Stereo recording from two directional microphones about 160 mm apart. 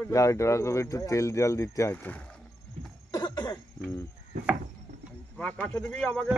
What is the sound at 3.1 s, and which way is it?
Cough, 25° left (ahead or behind).